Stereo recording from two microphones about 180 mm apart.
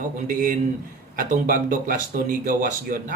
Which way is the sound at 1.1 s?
50° right (ahead or behind).